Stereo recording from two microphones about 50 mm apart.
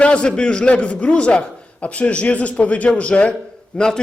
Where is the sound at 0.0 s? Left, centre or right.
Left.